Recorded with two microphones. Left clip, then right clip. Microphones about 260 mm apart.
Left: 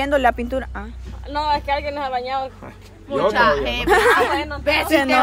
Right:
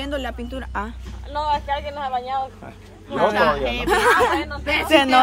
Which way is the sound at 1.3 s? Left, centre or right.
Left.